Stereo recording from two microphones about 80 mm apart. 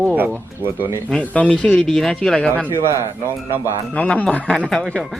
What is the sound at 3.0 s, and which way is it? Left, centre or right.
Speech, right.